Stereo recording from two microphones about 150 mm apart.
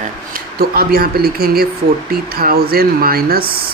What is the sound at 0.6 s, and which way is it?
Speech, 90° right.